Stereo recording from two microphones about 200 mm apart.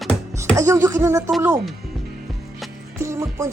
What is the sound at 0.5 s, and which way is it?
Music, 15° right (ahead or behind).